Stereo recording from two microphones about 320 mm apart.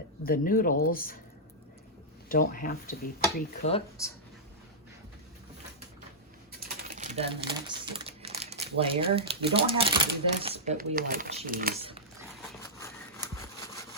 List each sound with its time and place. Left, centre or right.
0.2 s speech: left
2.3 s speech: left
6.8 s speech: right
12.5 s a sound: centre